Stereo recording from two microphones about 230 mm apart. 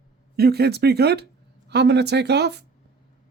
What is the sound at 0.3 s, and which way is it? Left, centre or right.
Speech, right.